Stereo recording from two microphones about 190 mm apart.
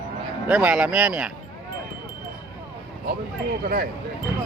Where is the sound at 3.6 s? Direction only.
50° right (ahead or behind).